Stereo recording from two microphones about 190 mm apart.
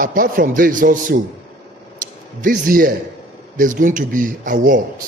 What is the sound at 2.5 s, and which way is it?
A man's voice, 50° right (ahead or behind).